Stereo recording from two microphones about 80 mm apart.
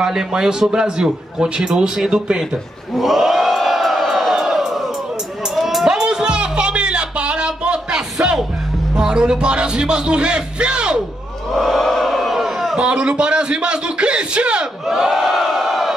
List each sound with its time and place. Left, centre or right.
0.0 s a man's voice: centre
3.0 s crowd: centre
5.5 s music: centre
8.9 s a man's voice: centre
11.5 s a sound: centre